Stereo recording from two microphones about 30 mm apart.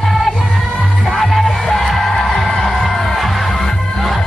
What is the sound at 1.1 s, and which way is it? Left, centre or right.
Music, centre.